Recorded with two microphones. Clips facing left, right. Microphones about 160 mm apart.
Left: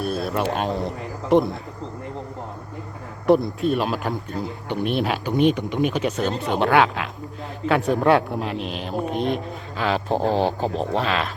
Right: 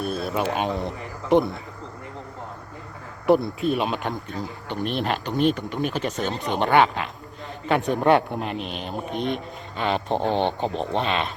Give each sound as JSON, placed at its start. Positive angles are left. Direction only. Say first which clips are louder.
{"t": 0.0, "sound": "a man's voice", "louder": "left 2 dB", "side_deg": 0}
{"t": 3.2, "sound": "speech", "louder": "left 2 dB", "side_deg": 0}
{"t": 5.7, "sound": "speech", "louder": "left 4 dB", "side_deg": 5}